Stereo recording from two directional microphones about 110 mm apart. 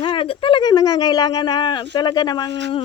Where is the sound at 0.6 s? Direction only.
35° left (ahead or behind).